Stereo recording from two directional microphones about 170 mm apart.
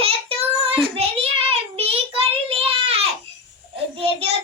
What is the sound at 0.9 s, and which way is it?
Child singing, 35° right (ahead or behind).